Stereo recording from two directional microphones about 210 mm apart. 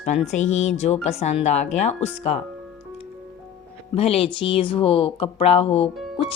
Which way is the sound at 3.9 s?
30° left (ahead or behind).